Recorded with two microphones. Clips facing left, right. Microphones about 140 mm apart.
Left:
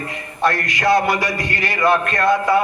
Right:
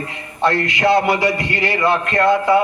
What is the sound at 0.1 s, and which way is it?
A man's voice, 20° right (ahead or behind).